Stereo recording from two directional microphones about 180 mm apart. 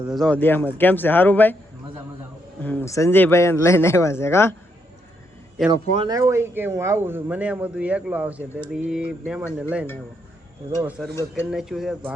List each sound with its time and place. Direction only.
0.1 s speech: 5° left (ahead or behind)
2.6 s speech: 10° left (ahead or behind)
5.7 s speech: 35° right (ahead or behind)
6.1 s a man's voice: 15° right (ahead or behind)
10.8 s speech: 5° right (ahead or behind)
11.1 s speech: 15° left (ahead or behind)
11.5 s speech: centre (ahead or behind)